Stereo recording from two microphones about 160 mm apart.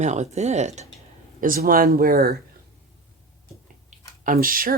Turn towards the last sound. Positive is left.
turn(degrees=-60)  # may be behind; listen again after turning